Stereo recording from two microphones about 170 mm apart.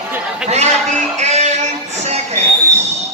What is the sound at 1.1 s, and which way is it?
Music, 40° right (ahead or behind).